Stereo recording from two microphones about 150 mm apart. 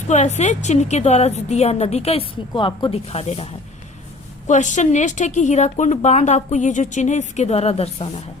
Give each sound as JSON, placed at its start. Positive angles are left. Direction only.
{"t": 0.1, "sound": "a woman's voice", "side_deg": 50}
{"t": 2.5, "sound": "speech", "side_deg": 30}
{"t": 4.4, "sound": "a woman's voice", "side_deg": 55}